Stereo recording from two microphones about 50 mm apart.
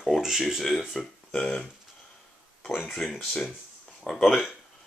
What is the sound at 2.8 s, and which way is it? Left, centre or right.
Speech, centre.